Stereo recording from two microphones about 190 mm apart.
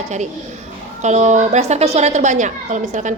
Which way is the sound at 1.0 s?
40° right (ahead or behind).